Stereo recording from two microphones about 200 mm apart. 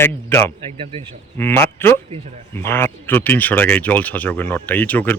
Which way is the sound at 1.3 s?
10° left (ahead or behind).